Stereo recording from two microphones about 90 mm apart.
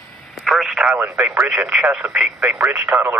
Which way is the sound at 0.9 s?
20° right (ahead or behind).